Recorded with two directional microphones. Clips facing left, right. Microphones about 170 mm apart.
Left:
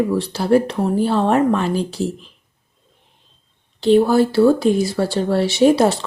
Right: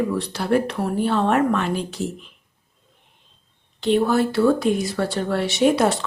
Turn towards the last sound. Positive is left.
turn(degrees=30)  # may be behind; listen again after turning